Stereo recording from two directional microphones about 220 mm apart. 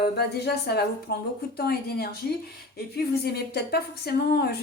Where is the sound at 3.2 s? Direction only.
45° left (ahead or behind).